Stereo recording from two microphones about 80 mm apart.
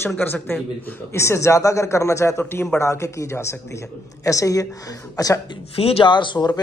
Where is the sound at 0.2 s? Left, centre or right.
Left.